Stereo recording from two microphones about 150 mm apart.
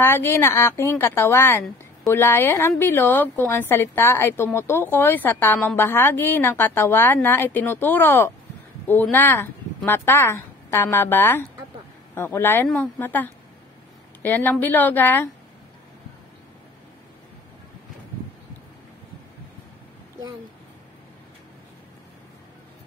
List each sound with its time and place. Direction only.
0.0 s speech: 15° left (ahead or behind)